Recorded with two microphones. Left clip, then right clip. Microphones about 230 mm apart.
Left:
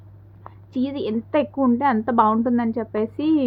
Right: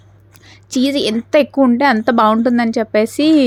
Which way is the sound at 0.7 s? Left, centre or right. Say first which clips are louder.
Right 9 dB; right.